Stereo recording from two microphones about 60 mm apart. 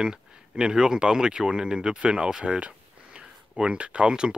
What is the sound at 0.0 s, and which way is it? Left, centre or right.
Speech, centre.